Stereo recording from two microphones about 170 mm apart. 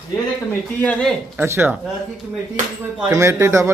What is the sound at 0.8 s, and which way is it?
Speech, 5° left (ahead or behind).